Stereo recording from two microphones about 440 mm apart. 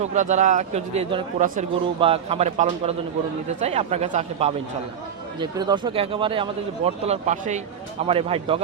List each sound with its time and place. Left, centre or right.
0.0 s speech: centre